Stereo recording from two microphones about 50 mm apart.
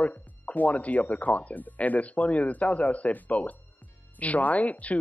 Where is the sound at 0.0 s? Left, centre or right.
Left.